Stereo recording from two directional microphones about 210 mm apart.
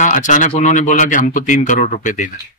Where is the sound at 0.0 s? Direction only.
35° left (ahead or behind).